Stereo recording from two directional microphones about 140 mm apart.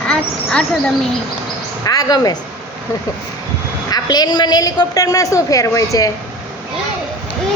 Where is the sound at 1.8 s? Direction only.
25° left (ahead or behind).